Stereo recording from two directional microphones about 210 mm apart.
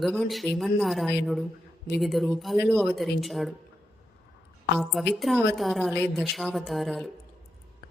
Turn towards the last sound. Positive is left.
turn(degrees=0)  # may be behind; listen again after turning